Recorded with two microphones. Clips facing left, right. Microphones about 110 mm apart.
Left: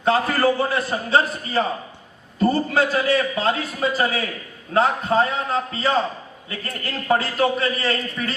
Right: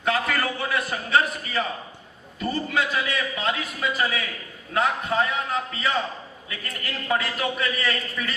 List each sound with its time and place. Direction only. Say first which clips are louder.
0.0 s a man's voice: left 6 dB; 30° left (ahead or behind)